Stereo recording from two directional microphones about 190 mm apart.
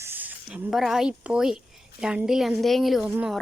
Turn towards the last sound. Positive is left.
turn(degrees=-5)  # may be behind; listen again after turning